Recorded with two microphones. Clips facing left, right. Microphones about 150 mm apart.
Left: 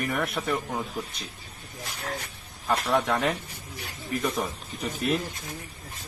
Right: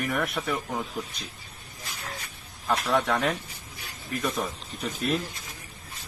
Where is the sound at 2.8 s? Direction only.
Centre (ahead or behind).